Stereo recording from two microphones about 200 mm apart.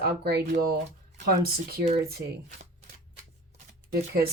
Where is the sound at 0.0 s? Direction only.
50° right (ahead or behind).